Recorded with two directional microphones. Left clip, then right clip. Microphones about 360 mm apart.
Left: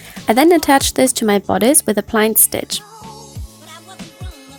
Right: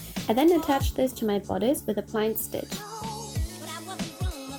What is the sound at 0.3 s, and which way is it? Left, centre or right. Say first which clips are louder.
Speech: left 11 dB; left.